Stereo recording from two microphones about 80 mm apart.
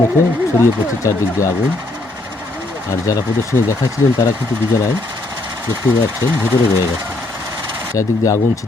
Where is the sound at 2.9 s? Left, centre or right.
Left.